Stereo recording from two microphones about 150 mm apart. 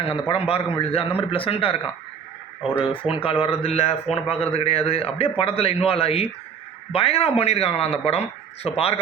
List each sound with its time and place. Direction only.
0.0 s a man's voice: 40° left (ahead or behind)
2.6 s speech: 5° right (ahead or behind)
2.8 s a man's voice: 35° left (ahead or behind)